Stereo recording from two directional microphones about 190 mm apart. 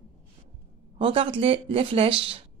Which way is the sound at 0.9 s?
30° right (ahead or behind).